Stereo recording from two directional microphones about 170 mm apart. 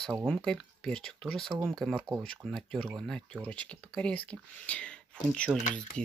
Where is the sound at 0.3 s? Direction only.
5° left (ahead or behind).